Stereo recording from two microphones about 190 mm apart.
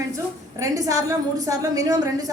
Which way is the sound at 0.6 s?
20° right (ahead or behind).